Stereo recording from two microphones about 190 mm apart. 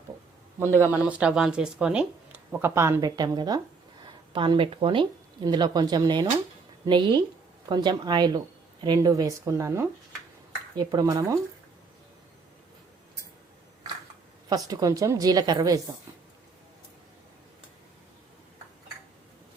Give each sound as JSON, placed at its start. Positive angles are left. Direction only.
{"t": 0.7, "sound": "a woman's voice", "side_deg": -10}
{"t": 14.7, "sound": "a woman's voice", "side_deg": -20}